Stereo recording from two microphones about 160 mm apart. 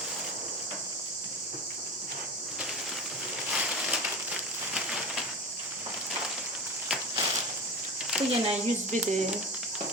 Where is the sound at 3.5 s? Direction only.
5° right (ahead or behind).